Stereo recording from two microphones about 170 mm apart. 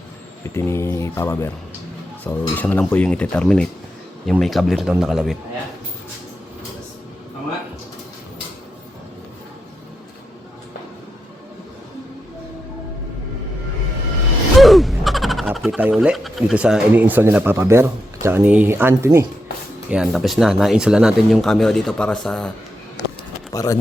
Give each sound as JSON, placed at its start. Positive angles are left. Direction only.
{"t": 0.4, "sound": "speech", "side_deg": 15}
{"t": 14.6, "sound": "speech", "side_deg": 0}
{"t": 19.9, "sound": "speech", "side_deg": 0}
{"t": 23.5, "sound": "a sound", "side_deg": 20}